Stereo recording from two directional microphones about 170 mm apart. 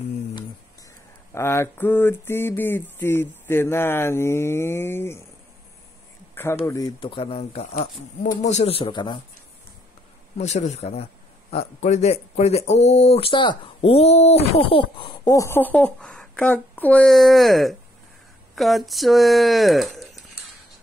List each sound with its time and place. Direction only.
1.3 s a sound: 15° left (ahead or behind)
6.7 s speech: 25° left (ahead or behind)
8.2 s speech: 45° left (ahead or behind); by 9.2 s 25° left (ahead or behind)
10.3 s speech: 45° left (ahead or behind); by 20.2 s centre (ahead or behind)